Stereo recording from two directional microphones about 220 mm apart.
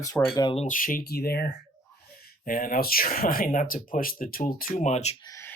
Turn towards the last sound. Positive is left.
turn(degrees=15)  # may be behind; listen again after turning